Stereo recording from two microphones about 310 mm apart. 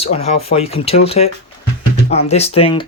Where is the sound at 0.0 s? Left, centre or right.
Centre.